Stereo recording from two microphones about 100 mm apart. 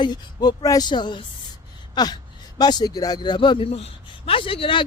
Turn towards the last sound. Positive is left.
turn(degrees=60)  # may be behind; listen again after turning